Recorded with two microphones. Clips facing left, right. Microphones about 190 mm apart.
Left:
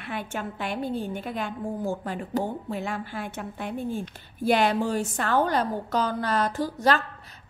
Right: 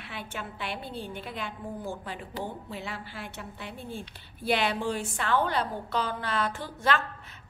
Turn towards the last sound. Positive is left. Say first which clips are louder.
# left 5 dB
turn(degrees=40)  # may be behind; listen again after turning